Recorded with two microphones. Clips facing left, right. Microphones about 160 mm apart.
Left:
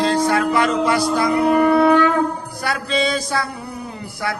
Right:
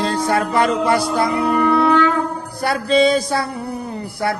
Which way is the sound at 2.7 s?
35° right (ahead or behind).